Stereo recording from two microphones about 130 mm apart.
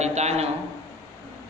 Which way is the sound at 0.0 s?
60° right (ahead or behind).